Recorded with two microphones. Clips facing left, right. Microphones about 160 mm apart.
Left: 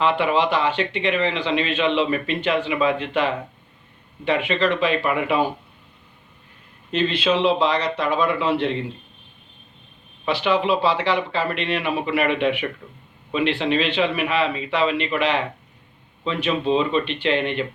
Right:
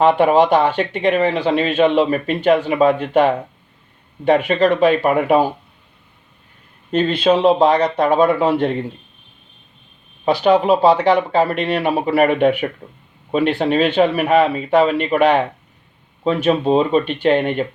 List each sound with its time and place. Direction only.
0.0 s speech: 50° right (ahead or behind)
6.9 s speech: 45° right (ahead or behind)
10.2 s speech: 40° right (ahead or behind)